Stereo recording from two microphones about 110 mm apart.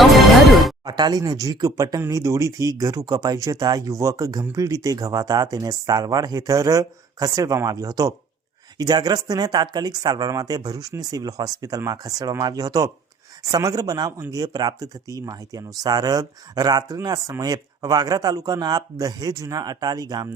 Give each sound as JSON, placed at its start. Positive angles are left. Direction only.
{"t": 0.0, "sound": "music", "side_deg": 0}
{"t": 0.9, "sound": "speech", "side_deg": -40}